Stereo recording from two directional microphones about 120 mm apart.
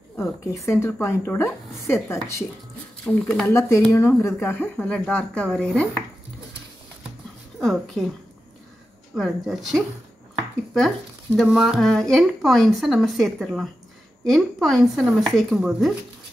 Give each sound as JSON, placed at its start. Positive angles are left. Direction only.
{"t": 0.2, "sound": "a woman's voice", "side_deg": 20}
{"t": 3.1, "sound": "speech", "side_deg": 5}
{"t": 3.4, "sound": "a woman's voice", "side_deg": 25}
{"t": 7.6, "sound": "a woman's voice", "side_deg": 5}
{"t": 9.1, "sound": "speech", "side_deg": 0}
{"t": 11.3, "sound": "speech", "side_deg": 0}